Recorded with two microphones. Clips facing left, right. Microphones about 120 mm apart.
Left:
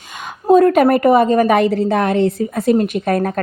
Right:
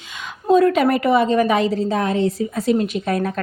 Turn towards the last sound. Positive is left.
turn(degrees=50)  # may be behind; listen again after turning